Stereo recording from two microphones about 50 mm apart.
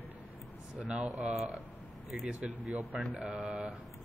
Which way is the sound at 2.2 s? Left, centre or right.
Right.